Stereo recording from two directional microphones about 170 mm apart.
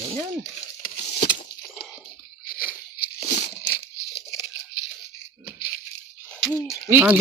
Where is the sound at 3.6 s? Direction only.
75° left (ahead or behind).